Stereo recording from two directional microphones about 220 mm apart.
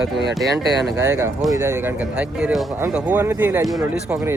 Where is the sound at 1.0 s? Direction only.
15° right (ahead or behind).